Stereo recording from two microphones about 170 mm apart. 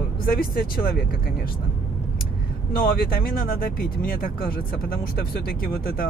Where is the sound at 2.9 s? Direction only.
60° left (ahead or behind).